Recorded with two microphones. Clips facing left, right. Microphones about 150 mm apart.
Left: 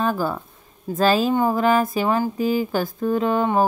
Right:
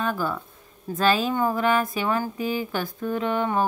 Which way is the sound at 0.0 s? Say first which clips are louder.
Left 4 dB; 40° left (ahead or behind).